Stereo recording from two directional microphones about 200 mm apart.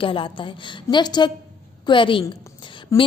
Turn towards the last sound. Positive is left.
turn(degrees=15)  # may be behind; listen again after turning